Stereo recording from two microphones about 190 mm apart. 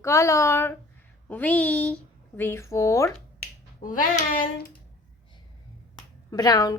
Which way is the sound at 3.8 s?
45° left (ahead or behind).